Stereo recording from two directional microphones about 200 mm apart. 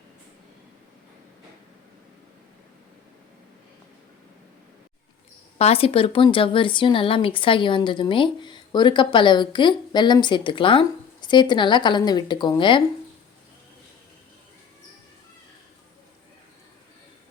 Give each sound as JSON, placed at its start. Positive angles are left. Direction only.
{"t": 5.5, "sound": "speech", "side_deg": 30}